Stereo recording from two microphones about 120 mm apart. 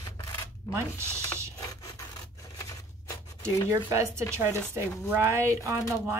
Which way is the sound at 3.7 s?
25° right (ahead or behind).